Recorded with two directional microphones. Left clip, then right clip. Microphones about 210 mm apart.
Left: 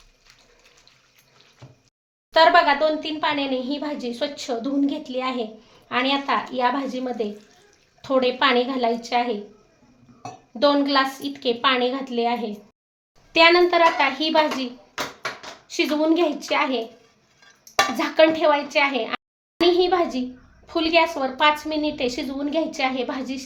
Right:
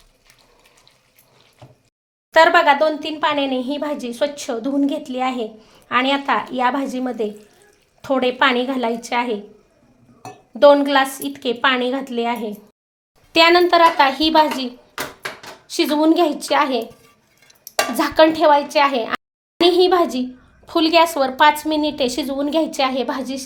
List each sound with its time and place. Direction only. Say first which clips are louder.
2.3 s speech: right 3 dB; 30° right (ahead or behind)
10.6 s a woman's voice: right 7 dB; 25° right (ahead or behind)
17.9 s a woman's voice: right 5 dB; 30° right (ahead or behind)